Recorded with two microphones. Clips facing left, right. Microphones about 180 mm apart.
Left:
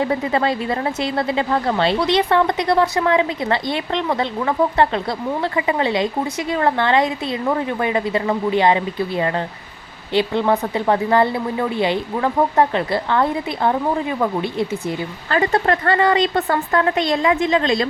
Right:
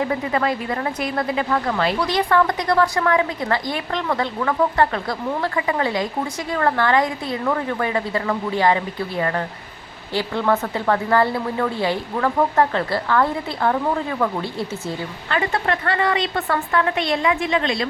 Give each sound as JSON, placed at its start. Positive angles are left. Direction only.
{"t": 0.0, "sound": "speech", "side_deg": 30}
{"t": 15.3, "sound": "a woman's voice", "side_deg": 35}